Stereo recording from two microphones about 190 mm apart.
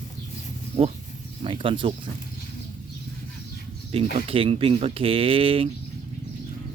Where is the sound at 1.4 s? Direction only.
30° right (ahead or behind).